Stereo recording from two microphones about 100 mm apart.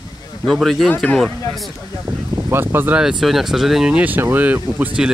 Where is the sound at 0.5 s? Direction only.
Centre (ahead or behind).